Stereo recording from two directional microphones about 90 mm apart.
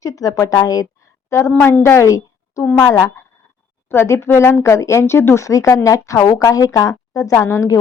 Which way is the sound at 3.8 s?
30° left (ahead or behind).